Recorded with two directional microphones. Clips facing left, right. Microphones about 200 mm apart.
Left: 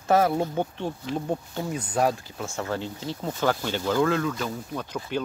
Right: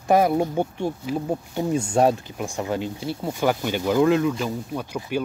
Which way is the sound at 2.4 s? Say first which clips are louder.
Right 4 dB; 15° right (ahead or behind).